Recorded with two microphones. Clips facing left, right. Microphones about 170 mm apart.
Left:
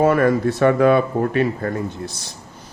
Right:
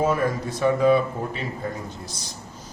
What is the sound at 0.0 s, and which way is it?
Speech, 65° left (ahead or behind).